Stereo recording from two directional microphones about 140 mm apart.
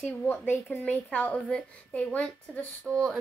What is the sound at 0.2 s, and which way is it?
A woman's voice, 15° left (ahead or behind).